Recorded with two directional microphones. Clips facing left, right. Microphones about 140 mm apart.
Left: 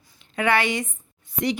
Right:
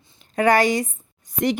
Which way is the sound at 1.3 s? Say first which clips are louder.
Right 3 dB; 50° right (ahead or behind).